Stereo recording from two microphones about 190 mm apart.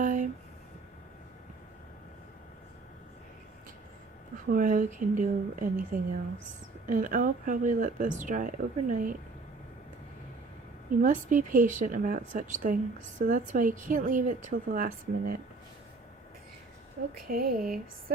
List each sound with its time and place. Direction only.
0.0 s a sound: 45° right (ahead or behind)
4.5 s speech: 45° right (ahead or behind)
11.0 s speech: 45° right (ahead or behind)
17.2 s speech: 50° right (ahead or behind)